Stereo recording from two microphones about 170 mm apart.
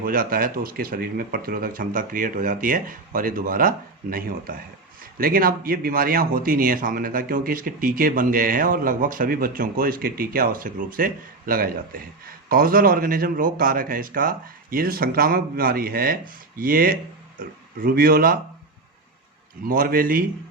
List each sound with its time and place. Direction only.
0.0 s speech: 55° right (ahead or behind)
19.6 s speech: 55° right (ahead or behind)